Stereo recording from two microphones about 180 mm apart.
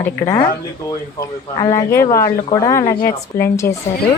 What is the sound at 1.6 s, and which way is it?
Speech, 15° left (ahead or behind).